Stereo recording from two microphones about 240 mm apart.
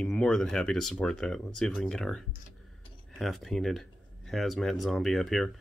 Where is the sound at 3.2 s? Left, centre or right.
Centre.